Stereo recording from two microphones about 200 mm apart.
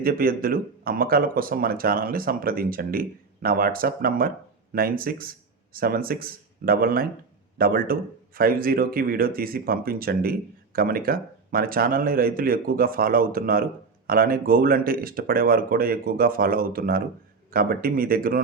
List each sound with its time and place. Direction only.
0.0 s speech: 45° right (ahead or behind)